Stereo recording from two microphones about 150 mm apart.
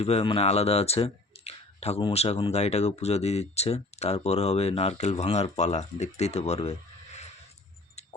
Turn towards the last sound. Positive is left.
turn(degrees=45)  # may be behind; listen again after turning